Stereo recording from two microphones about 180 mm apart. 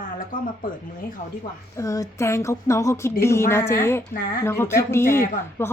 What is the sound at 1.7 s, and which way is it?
A woman's voice, 20° left (ahead or behind).